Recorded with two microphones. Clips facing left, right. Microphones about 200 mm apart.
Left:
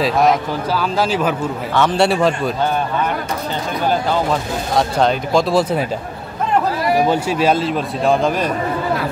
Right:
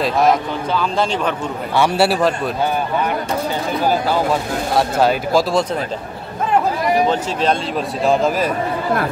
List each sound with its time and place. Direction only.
0.0 s speech: centre (ahead or behind)
1.8 s speech: 10° right (ahead or behind)
4.7 s speech: 5° right (ahead or behind)
7.1 s speech: 10° left (ahead or behind)